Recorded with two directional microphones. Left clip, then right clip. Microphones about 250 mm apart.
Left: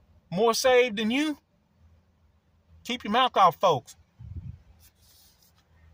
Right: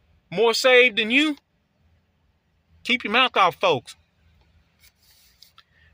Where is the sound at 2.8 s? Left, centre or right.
Right.